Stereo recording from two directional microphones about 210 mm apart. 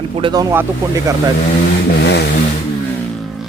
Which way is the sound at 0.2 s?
20° right (ahead or behind).